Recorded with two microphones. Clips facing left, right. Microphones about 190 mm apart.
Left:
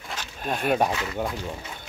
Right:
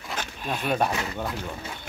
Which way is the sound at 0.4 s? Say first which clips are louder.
Left 4 dB; 45° left (ahead or behind).